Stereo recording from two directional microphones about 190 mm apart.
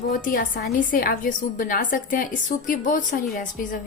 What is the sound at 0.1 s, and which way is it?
A woman's voice, 50° left (ahead or behind).